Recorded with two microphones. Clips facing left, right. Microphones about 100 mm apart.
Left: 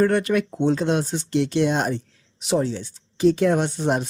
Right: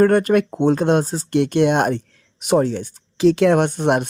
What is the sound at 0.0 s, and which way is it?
Speech, 45° right (ahead or behind).